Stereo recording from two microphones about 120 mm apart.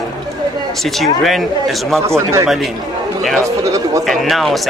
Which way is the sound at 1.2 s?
Centre (ahead or behind).